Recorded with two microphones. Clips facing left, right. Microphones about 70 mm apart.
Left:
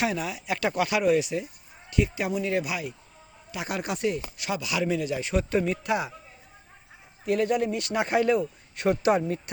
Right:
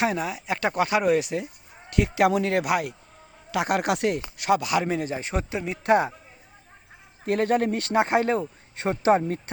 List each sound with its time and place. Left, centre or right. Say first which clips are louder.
0.0 s speech: right 3 dB; right
1.9 s speech: right 6 dB; right
5.5 s speech: left 5 dB; centre
5.8 s speech: right 7 dB; right
7.3 s speech: right 2 dB; right
7.9 s speech: right 1 dB; right